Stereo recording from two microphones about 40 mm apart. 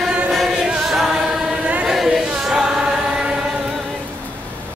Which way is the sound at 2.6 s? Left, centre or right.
Centre.